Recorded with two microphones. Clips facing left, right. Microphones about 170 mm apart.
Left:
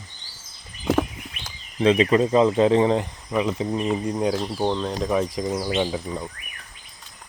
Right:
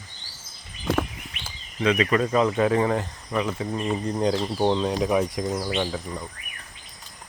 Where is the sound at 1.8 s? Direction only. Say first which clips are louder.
Left 4 dB; 30° left (ahead or behind); by 4.4 s 10° left (ahead or behind).